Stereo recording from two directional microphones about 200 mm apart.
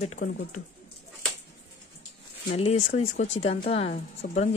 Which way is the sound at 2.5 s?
30° left (ahead or behind).